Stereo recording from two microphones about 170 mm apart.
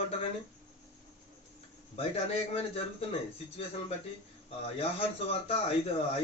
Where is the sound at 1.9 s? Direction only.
35° left (ahead or behind).